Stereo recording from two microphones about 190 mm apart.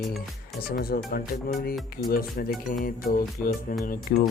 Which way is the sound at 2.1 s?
50° left (ahead or behind).